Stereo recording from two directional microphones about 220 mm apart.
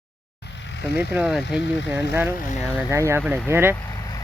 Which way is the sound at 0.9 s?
5° right (ahead or behind).